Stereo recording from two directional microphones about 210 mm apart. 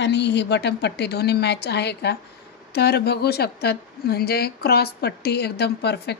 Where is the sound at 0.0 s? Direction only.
55° left (ahead or behind).